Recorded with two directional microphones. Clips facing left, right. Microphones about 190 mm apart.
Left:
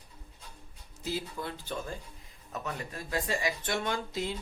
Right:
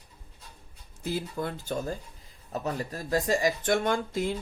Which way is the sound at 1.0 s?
50° right (ahead or behind).